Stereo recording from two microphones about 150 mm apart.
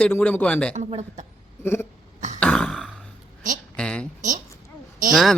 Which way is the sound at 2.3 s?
10° left (ahead or behind).